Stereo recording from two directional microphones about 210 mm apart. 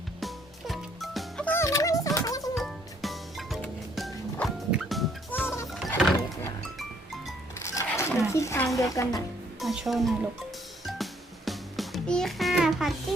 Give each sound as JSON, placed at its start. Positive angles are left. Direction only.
{"t": 0.2, "sound": "music", "side_deg": 0}
{"t": 2.6, "sound": "music", "side_deg": 0}
{"t": 5.8, "sound": "power windows", "side_deg": 0}
{"t": 6.7, "sound": "music", "side_deg": 0}
{"t": 7.6, "sound": "chink", "side_deg": 15}
{"t": 8.3, "sound": "a sound", "side_deg": 15}
{"t": 8.8, "sound": "speech", "side_deg": 15}
{"t": 9.6, "sound": "speech", "side_deg": 0}
{"t": 10.8, "sound": "music", "side_deg": 0}
{"t": 13.1, "sound": "rub", "side_deg": 0}